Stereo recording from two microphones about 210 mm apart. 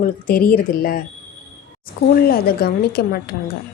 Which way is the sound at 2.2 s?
45° left (ahead or behind).